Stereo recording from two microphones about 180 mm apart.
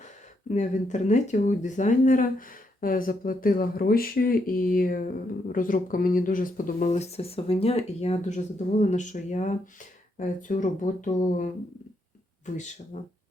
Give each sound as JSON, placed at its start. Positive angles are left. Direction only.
{"t": 0.5, "sound": "speech", "side_deg": 40}
{"t": 12.5, "sound": "speech", "side_deg": 40}